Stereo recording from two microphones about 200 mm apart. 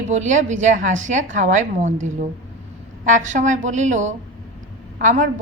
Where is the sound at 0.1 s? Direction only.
35° right (ahead or behind).